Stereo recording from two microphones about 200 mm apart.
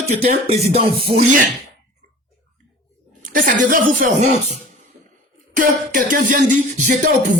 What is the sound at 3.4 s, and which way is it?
Beatboxing, 40° right (ahead or behind).